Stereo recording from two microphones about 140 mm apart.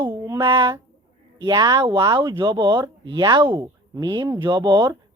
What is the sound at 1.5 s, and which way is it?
A woman's voice, 30° right (ahead or behind).